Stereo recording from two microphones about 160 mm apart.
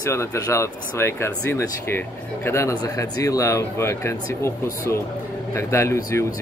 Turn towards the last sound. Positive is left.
turn(degrees=15)  # may be behind; listen again after turning